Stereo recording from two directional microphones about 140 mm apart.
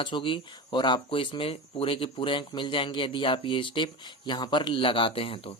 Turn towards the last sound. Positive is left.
turn(degrees=40)  # may be behind; listen again after turning